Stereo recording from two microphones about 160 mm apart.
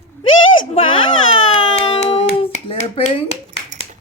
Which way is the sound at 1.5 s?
35° left (ahead or behind).